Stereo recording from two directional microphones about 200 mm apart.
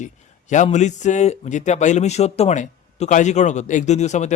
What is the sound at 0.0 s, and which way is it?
A man's voice, 40° left (ahead or behind).